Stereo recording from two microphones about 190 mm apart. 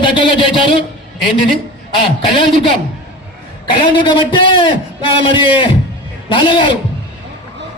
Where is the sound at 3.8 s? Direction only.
25° left (ahead or behind).